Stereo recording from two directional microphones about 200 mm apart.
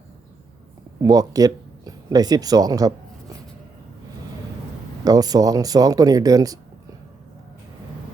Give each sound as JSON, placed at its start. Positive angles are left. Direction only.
{"t": 1.0, "sound": "speech", "side_deg": -20}
{"t": 5.0, "sound": "speech", "side_deg": -20}